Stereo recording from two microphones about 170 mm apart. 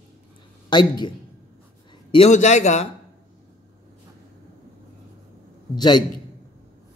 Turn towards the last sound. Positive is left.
turn(degrees=25)  # may be behind; listen again after turning